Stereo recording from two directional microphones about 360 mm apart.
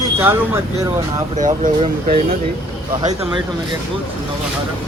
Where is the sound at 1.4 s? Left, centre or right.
Right.